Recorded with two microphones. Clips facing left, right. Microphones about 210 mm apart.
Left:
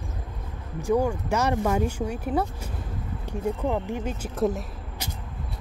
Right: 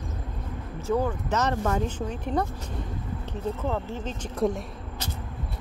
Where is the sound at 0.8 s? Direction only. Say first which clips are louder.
Left 3 dB; 15° left (ahead or behind).